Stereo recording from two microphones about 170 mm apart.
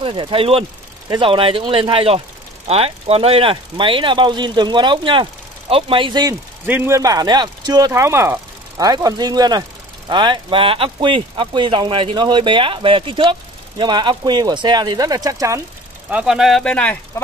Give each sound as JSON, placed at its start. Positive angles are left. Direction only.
{"t": 0.0, "sound": "speech", "side_deg": -30}
{"t": 6.6, "sound": "speech", "side_deg": -10}
{"t": 16.1, "sound": "speech", "side_deg": -5}